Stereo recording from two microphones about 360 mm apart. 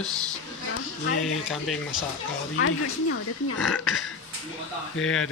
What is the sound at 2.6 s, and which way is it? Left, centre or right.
Speech, left.